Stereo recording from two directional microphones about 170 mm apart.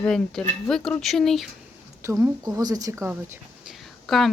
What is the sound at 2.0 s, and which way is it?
A woman's voice, 15° right (ahead or behind).